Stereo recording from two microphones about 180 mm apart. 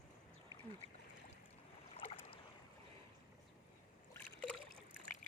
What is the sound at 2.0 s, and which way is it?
Boat, 30° left (ahead or behind).